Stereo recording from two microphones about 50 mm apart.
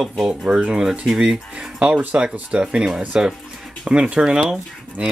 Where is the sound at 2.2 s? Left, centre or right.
Centre.